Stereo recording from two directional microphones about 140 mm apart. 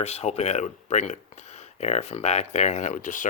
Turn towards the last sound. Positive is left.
turn(degrees=65)  # may be behind; listen again after turning